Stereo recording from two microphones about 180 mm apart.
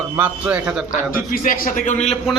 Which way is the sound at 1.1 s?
50° left (ahead or behind).